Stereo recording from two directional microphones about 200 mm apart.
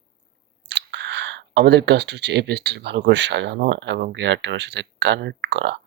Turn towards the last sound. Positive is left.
turn(degrees=-60)  # may be behind; listen again after turning